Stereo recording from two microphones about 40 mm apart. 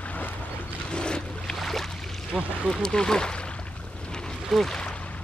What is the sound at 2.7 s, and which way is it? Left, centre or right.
Speech, centre.